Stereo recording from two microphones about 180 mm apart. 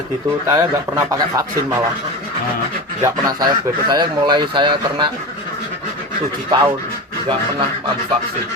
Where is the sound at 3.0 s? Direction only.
20° right (ahead or behind).